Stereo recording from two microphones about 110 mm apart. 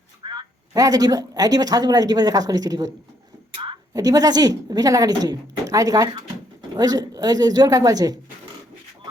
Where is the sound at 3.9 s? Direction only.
35° right (ahead or behind).